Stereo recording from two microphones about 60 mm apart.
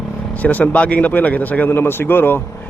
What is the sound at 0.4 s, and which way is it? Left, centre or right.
A man's voice, left.